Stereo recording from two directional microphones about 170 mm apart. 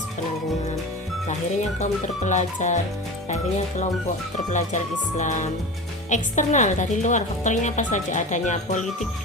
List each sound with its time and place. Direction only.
1.8 s a woman's voice: 45° left (ahead or behind)
4.5 s a woman's voice: 45° left (ahead or behind)